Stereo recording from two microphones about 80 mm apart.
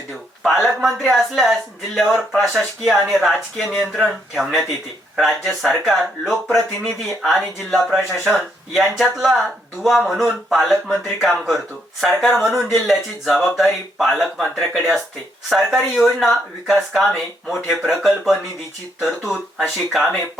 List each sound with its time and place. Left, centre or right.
0.4 s speech: centre